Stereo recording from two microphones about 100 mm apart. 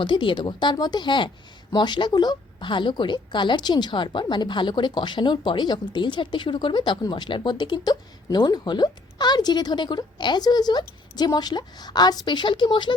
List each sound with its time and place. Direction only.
0.0 s a woman's voice: 55° left (ahead or behind)